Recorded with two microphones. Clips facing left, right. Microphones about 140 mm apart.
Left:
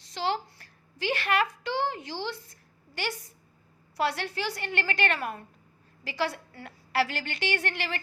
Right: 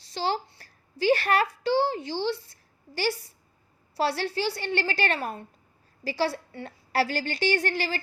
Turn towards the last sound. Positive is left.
turn(degrees=-35)  # may be behind; listen again after turning